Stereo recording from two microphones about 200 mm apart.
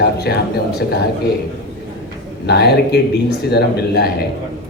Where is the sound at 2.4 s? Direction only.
55° left (ahead or behind).